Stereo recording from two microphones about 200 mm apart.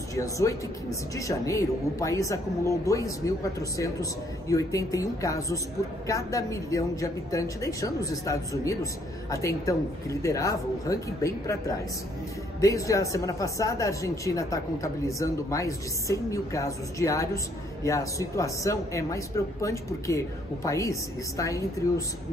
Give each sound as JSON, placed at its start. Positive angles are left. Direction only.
{"t": 0.1, "sound": "speech", "side_deg": 15}